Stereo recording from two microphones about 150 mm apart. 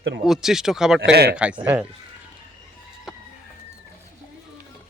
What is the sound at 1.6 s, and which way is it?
Speech, 10° right (ahead or behind).